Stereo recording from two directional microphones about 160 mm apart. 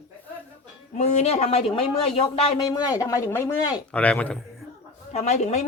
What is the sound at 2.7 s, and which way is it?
Speech, 20° left (ahead or behind).